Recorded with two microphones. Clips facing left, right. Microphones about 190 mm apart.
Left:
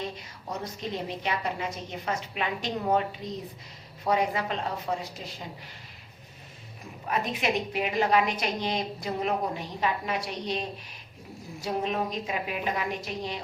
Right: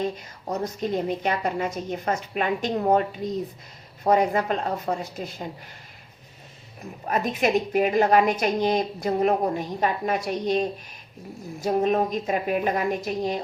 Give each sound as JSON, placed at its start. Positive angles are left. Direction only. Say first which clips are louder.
{"t": 0.0, "sound": "a woman's voice", "louder": "right 8 dB", "side_deg": -45}
{"t": 7.0, "sound": "a woman's voice", "louder": "right 5 dB", "side_deg": -45}